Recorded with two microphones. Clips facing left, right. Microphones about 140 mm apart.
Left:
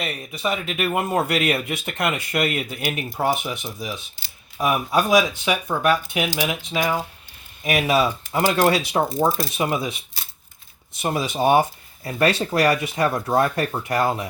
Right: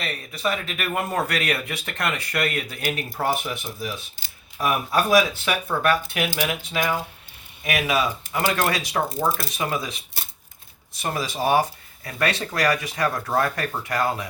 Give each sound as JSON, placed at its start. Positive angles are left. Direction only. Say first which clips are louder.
{"t": 0.0, "sound": "speech", "louder": "left 1 dB", "side_deg": 15}
{"t": 11.0, "sound": "speech", "louder": "left 4 dB", "side_deg": 25}